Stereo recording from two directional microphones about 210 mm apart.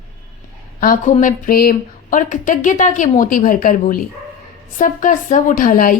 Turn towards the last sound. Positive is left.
turn(degrees=40)  # may be behind; listen again after turning